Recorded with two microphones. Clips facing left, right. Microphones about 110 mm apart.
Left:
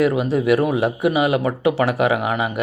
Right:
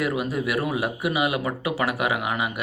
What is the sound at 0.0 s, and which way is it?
Speech, 30° left (ahead or behind).